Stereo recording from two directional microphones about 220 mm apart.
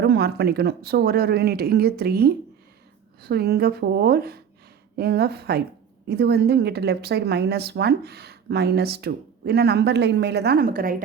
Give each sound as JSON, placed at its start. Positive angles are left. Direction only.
{"t": 0.0, "sound": "a woman's voice", "side_deg": -50}